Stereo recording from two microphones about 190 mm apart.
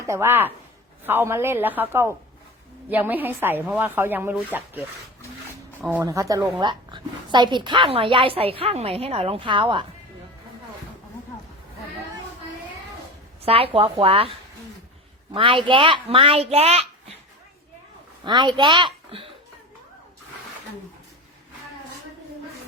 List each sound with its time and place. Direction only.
0.0 s a woman's voice: 15° right (ahead or behind)
6.0 s a woman's voice: 15° right (ahead or behind)
13.4 s a woman's voice: 30° right (ahead or behind)
18.3 s a woman's voice: 25° right (ahead or behind)